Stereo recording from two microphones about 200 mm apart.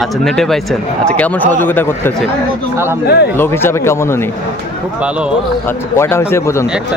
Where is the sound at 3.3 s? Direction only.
10° left (ahead or behind).